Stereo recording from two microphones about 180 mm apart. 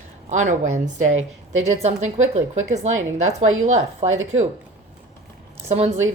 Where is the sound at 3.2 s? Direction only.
40° right (ahead or behind).